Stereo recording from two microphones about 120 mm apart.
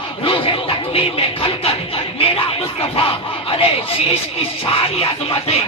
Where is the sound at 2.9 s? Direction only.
50° left (ahead or behind).